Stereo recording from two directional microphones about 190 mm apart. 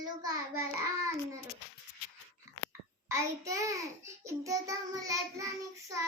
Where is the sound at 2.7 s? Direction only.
15° right (ahead or behind).